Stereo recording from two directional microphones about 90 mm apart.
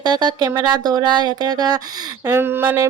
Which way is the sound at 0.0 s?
50° right (ahead or behind).